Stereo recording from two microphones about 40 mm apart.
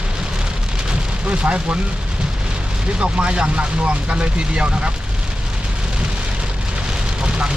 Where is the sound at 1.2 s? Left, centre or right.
Right.